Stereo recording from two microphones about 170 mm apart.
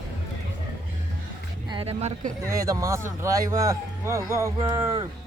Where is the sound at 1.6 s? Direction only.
30° right (ahead or behind).